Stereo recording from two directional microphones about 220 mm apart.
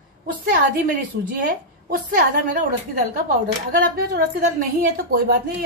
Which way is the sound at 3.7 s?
40° right (ahead or behind).